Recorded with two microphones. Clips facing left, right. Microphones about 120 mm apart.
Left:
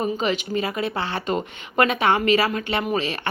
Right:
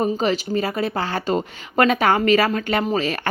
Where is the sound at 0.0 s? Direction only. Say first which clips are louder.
Right 3 dB; 40° right (ahead or behind).